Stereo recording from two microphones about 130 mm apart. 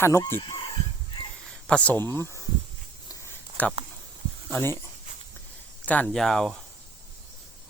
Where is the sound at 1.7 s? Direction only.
10° left (ahead or behind).